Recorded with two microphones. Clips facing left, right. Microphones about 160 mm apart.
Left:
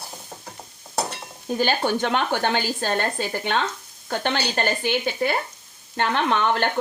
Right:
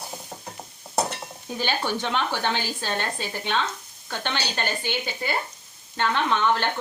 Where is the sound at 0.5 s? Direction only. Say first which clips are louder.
Right 2 dB; centre (ahead or behind).